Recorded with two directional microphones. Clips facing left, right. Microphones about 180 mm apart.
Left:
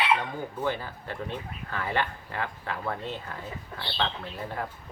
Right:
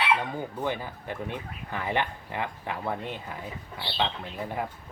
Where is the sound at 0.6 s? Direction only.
15° right (ahead or behind).